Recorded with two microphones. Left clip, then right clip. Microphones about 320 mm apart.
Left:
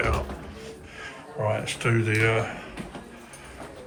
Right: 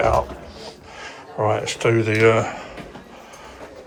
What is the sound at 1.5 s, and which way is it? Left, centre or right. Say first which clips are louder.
Speech: right 7 dB; centre.